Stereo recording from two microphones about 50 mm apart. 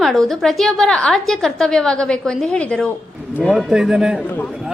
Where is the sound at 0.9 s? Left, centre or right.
Centre.